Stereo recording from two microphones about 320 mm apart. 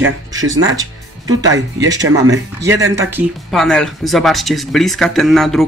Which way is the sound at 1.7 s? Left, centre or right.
Centre.